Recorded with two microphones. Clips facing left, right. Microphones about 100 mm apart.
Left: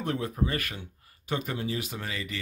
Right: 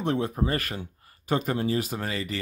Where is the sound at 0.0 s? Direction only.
25° right (ahead or behind).